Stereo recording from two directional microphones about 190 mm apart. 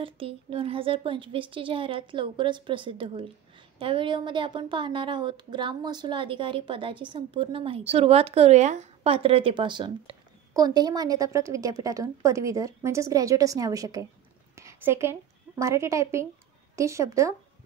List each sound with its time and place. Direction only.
0.0 s a woman's voice: 30° right (ahead or behind)